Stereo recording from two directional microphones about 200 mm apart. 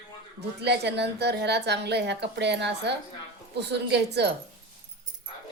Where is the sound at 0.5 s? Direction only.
55° right (ahead or behind).